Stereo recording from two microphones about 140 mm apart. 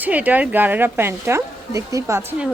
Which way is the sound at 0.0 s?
10° right (ahead or behind).